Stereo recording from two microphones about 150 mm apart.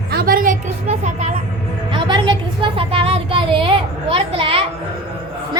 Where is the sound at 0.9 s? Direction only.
50° right (ahead or behind).